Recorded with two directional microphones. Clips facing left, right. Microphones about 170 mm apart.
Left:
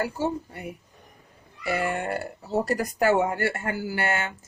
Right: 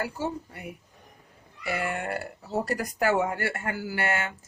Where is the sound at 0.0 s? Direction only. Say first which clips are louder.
Left 4 dB; 30° left (ahead or behind).